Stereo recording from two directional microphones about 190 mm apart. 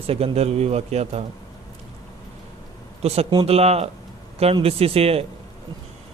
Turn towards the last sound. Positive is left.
turn(degrees=-30)  # may be behind; listen again after turning